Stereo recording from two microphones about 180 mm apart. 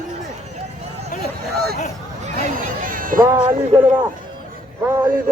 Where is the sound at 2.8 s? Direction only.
50° right (ahead or behind).